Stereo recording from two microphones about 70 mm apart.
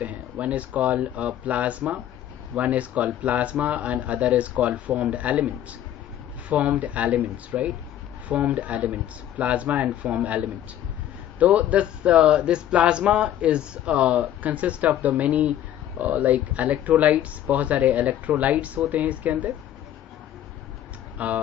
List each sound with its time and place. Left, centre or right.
0.0 s speech: right
6.5 s speech: right
21.2 s speech: right